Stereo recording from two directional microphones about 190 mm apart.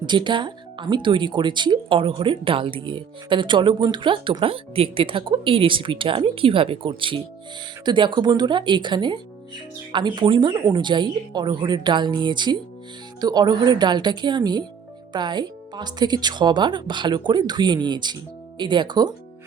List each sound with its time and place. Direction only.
0.0 s speech: 25° right (ahead or behind)